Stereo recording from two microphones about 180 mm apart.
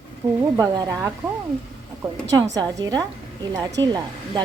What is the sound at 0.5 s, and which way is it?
Speech, 20° right (ahead or behind).